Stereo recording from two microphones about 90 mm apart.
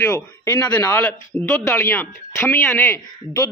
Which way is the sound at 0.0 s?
25° left (ahead or behind).